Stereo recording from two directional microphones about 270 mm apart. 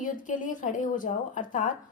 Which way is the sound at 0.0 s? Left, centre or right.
Left.